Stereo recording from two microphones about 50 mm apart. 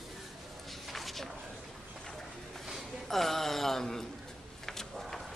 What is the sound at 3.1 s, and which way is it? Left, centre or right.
A man's voice, centre.